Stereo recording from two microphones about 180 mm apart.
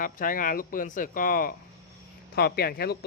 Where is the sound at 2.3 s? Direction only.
60° left (ahead or behind).